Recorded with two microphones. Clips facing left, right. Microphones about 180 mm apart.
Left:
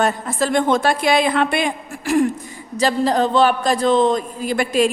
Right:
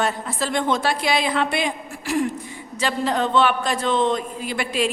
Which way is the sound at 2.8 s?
40° left (ahead or behind).